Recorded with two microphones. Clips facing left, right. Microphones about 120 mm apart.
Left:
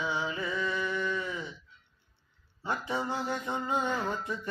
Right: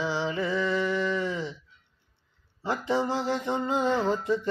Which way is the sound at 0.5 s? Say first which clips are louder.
Right 6 dB; 90° right.